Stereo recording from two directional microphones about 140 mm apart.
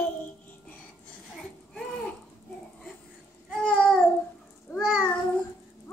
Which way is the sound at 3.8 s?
5° left (ahead or behind).